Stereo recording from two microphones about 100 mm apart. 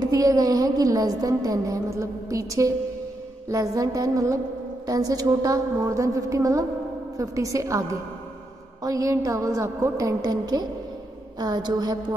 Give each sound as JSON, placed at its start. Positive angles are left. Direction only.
{"t": 0.0, "sound": "speech", "side_deg": -35}